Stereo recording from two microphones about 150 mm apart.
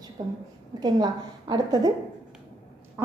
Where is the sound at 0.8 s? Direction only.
25° right (ahead or behind).